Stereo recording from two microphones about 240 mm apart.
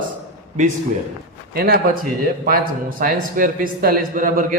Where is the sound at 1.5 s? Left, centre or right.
Right.